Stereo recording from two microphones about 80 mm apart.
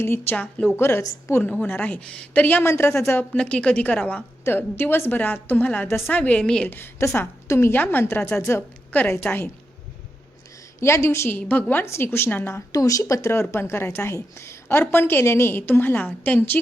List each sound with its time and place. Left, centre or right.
0.0 s a woman's voice: left
3.3 s a woman's voice: centre
6.7 s a woman's voice: left
10.8 s a woman's voice: left
11.3 s a woman's voice: left
11.9 s a woman's voice: left
12.7 s a woman's voice: left